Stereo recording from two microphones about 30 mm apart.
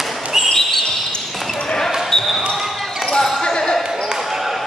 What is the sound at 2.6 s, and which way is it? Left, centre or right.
Basketball bounce, centre.